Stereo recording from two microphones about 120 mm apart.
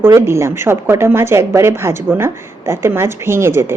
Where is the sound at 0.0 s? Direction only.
20° right (ahead or behind).